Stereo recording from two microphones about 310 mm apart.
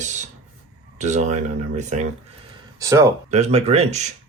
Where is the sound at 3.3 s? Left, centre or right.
Right.